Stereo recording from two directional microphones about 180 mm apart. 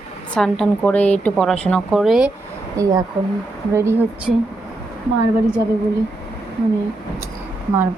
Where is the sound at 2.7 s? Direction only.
20° right (ahead or behind).